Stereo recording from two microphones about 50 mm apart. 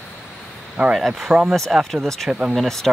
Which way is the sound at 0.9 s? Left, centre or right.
Centre.